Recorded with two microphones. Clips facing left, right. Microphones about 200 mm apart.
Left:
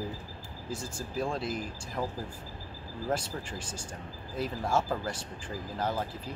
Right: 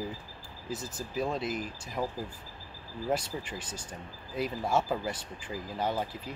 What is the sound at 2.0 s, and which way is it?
Speech, 5° right (ahead or behind).